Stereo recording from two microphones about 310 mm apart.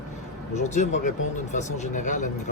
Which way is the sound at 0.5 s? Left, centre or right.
Left.